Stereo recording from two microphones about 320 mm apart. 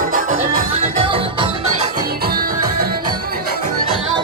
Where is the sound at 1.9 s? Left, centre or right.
Right.